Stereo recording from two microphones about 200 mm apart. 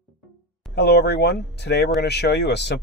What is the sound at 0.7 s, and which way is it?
Speech, 55° left (ahead or behind).